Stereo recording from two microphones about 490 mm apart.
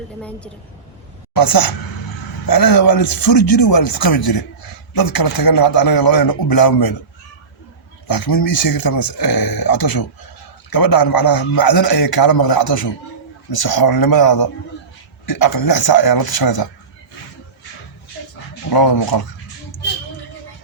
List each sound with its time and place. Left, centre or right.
0.2 s a woman's voice: centre
1.4 s a man's voice: left
8.0 s a man's voice: left
18.2 s dog: left
18.7 s a man's voice: left